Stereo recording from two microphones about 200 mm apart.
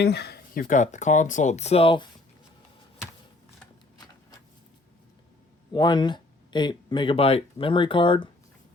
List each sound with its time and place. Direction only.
0.0 s speech: 55° left (ahead or behind); by 2.0 s 25° left (ahead or behind)
5.7 s speech: 20° left (ahead or behind)